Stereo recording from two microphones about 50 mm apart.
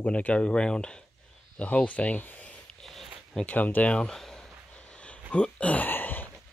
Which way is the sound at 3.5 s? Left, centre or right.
Left.